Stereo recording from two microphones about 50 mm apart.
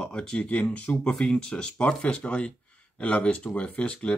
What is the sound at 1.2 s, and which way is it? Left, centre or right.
Speech, centre.